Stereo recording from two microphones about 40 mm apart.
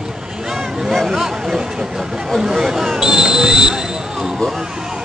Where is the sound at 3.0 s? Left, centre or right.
Centre.